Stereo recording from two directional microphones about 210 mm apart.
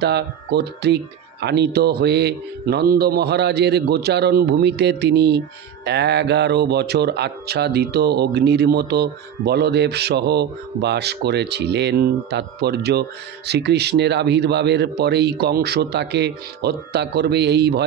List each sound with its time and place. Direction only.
0.0 s speech: 50° right (ahead or behind)